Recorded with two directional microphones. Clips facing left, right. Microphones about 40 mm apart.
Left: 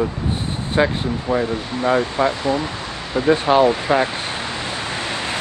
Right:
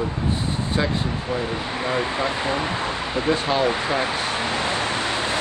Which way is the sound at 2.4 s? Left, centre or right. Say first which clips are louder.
Left 2 dB; centre.